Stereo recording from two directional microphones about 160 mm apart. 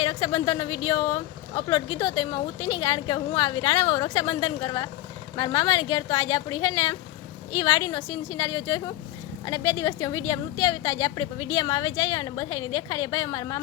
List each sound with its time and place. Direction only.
0.0 s speech: 30° left (ahead or behind)